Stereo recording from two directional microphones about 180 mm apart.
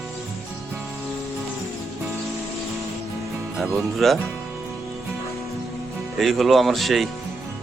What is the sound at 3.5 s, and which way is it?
Speech, centre (ahead or behind).